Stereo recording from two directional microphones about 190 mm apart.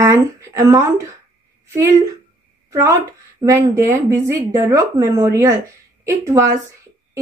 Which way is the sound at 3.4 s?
15° right (ahead or behind).